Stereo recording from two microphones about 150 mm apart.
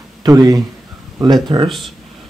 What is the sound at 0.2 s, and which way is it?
Speech, 25° right (ahead or behind).